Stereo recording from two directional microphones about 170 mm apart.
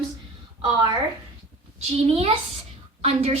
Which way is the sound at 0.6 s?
25° right (ahead or behind).